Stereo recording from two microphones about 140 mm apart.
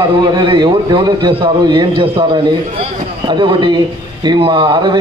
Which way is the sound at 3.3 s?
35° right (ahead or behind).